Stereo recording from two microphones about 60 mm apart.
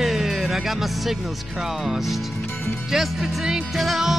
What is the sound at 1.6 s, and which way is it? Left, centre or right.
Speech, centre.